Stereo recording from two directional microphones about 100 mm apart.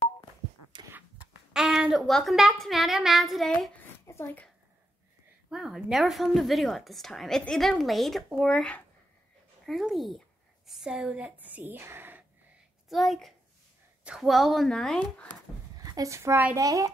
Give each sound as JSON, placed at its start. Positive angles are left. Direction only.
{"t": 1.5, "sound": "a sound", "side_deg": -5}
{"t": 2.0, "sound": "a woman's voice", "side_deg": 0}
{"t": 4.1, "sound": "speech", "side_deg": 20}
{"t": 5.5, "sound": "a woman's voice", "side_deg": -5}
{"t": 12.9, "sound": "a woman's voice", "side_deg": 0}
{"t": 15.8, "sound": "a child's voice", "side_deg": -35}